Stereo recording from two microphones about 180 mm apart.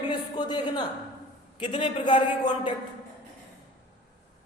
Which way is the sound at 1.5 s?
30° left (ahead or behind).